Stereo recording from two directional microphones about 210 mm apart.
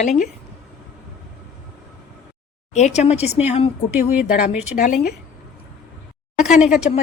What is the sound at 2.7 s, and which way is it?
A woman's voice, 30° left (ahead or behind).